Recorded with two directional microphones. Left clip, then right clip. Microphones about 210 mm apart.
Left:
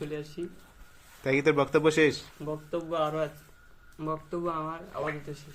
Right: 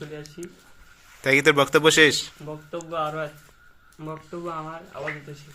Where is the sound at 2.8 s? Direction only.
20° left (ahead or behind).